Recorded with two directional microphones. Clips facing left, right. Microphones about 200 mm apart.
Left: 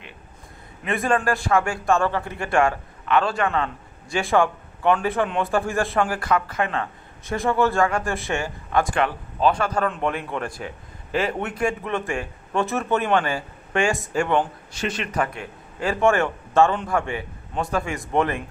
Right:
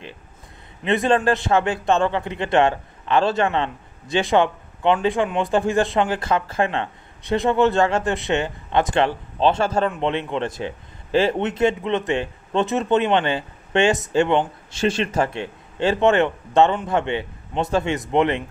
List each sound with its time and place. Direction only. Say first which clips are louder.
0.8 s a man's voice: right 4 dB; 25° right (ahead or behind)